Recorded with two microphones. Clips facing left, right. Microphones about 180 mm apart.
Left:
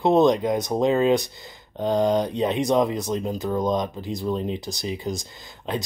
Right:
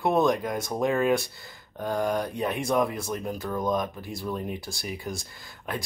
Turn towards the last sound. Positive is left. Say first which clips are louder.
# left 5 dB
turn(degrees=20)  # may be behind; listen again after turning